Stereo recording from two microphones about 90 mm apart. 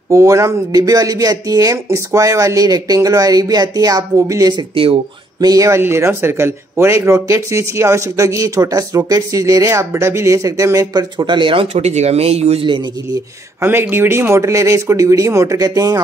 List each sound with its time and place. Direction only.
0.1 s speech: 35° right (ahead or behind)
5.8 s speech: 25° right (ahead or behind); by 12.8 s 65° right (ahead or behind)
13.6 s speech: 25° right (ahead or behind); by 16.0 s 40° right (ahead or behind)